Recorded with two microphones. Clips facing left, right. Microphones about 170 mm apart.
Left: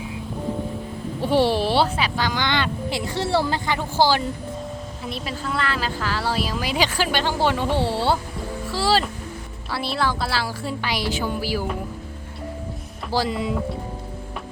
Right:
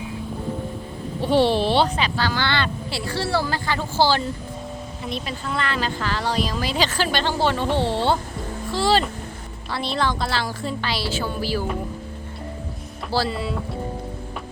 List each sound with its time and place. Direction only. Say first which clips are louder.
1.2 s a woman's voice: right 1 dB; 10° left (ahead or behind)
5.0 s a woman's voice: even; centre (ahead or behind)
13.1 s a woman's voice: left 1 dB; 15° left (ahead or behind)